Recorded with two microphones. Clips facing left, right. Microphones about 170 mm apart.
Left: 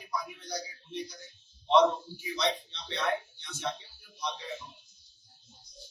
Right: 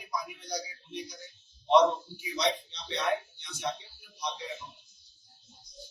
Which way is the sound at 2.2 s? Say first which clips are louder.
Right 1 dB; 15° right (ahead or behind).